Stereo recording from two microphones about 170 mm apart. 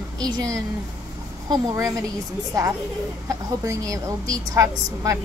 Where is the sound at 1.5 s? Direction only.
20° right (ahead or behind).